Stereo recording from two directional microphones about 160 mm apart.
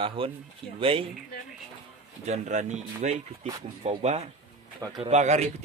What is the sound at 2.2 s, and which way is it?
Speech, 45° right (ahead or behind).